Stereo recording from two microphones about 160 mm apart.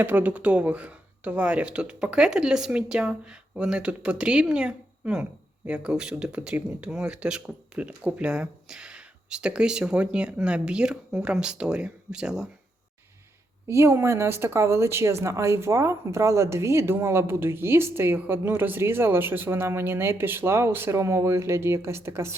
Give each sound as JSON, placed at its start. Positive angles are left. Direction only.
{"t": 0.0, "sound": "speech", "side_deg": -10}
{"t": 13.7, "sound": "speech", "side_deg": -15}